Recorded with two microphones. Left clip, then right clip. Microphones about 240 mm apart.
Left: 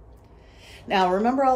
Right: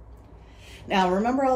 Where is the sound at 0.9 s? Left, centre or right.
Centre.